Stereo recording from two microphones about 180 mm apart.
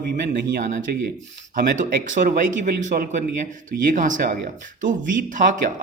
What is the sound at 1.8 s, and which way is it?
Speech, 45° right (ahead or behind).